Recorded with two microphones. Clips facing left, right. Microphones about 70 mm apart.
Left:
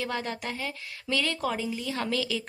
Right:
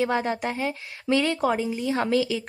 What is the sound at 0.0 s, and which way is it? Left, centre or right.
Speech, right.